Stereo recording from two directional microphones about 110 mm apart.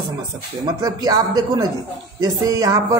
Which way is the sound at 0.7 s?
35° right (ahead or behind).